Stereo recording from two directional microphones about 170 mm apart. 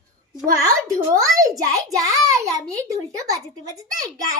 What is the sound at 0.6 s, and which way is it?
A child's voice, 20° right (ahead or behind).